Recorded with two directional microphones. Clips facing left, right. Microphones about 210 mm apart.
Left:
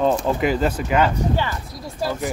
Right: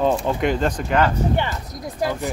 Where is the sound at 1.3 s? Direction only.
20° right (ahead or behind).